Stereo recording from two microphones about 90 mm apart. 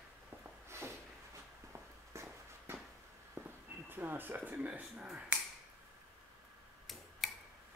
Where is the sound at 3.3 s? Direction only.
20° right (ahead or behind).